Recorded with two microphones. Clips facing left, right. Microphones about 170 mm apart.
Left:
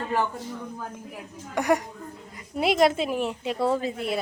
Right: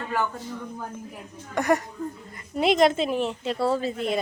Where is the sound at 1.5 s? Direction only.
15° left (ahead or behind).